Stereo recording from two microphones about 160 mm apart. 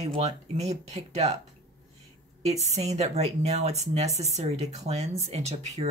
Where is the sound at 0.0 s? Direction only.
40° right (ahead or behind).